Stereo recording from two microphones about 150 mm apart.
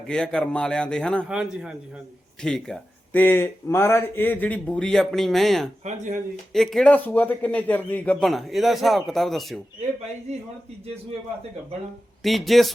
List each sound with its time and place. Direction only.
0.1 s a man's voice: 5° left (ahead or behind)
1.3 s a man's voice: 5° right (ahead or behind)
2.4 s speech: 5° left (ahead or behind)
5.8 s speech: 50° right (ahead or behind)
6.5 s a man's voice: centre (ahead or behind)
12.2 s a man's voice: centre (ahead or behind)